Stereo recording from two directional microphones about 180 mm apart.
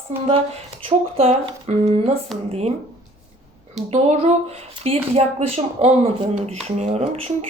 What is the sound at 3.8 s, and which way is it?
Speech, 35° right (ahead or behind).